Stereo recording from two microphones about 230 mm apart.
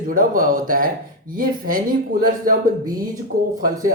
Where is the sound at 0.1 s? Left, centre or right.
Right.